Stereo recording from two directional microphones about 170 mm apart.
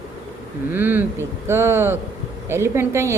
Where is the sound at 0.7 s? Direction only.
10° right (ahead or behind).